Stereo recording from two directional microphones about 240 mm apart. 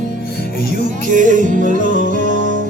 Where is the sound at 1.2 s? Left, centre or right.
Right.